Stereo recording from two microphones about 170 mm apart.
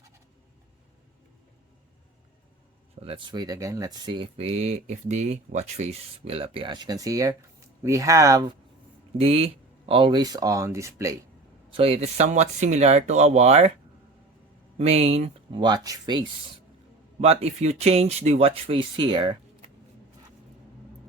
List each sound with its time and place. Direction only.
3.0 s speech: 35° right (ahead or behind)
3.3 s speech: 20° right (ahead or behind)
9.1 s speech: 35° right (ahead or behind); by 11.1 s 15° right (ahead or behind)
11.7 s speech: 35° right (ahead or behind)
14.8 s speech: 40° right (ahead or behind)
15.6 s speech: 25° right (ahead or behind)
17.2 s speech: 40° right (ahead or behind)